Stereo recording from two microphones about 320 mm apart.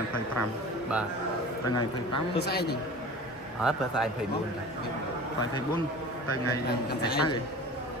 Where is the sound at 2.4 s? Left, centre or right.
Left.